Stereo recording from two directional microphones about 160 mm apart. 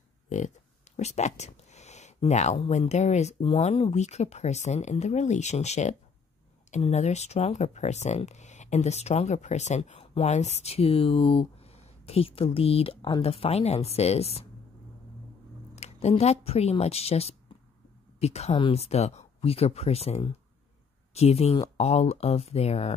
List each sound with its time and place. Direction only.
0.9 s speech: 45° left (ahead or behind)
15.7 s speech: 45° left (ahead or behind)